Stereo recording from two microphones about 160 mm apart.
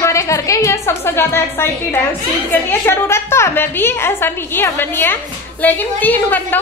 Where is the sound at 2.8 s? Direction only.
15° left (ahead or behind).